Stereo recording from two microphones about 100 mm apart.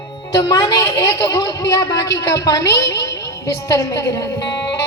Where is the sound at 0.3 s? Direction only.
35° left (ahead or behind).